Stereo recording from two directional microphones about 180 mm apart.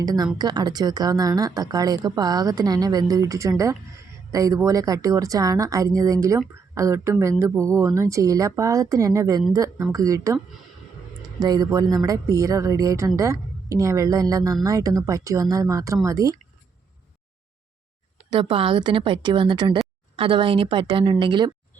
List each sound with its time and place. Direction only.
0.0 s a woman's voice: 20° right (ahead or behind)
18.3 s a woman's voice: 30° right (ahead or behind)